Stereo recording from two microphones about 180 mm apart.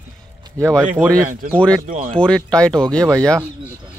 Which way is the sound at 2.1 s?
5° left (ahead or behind).